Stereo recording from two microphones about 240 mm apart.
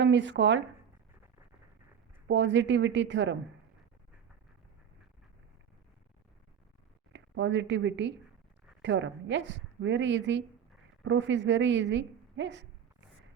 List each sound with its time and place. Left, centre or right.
0.0 s a woman's voice: right
2.2 s a woman's voice: right
7.1 s a woman's voice: right